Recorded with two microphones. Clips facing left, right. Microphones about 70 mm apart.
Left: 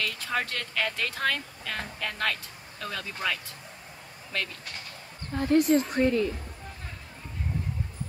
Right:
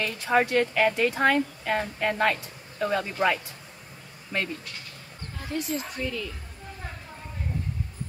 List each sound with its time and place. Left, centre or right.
0.0 s speech: right
5.4 s a woman's voice: left